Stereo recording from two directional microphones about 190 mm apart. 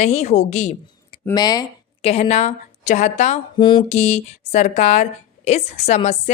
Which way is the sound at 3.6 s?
25° left (ahead or behind).